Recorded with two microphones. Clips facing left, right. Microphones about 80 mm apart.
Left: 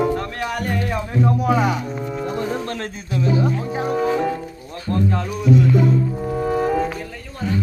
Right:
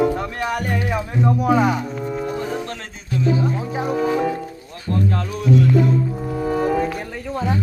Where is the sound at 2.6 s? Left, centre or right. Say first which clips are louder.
Left 3 dB; left.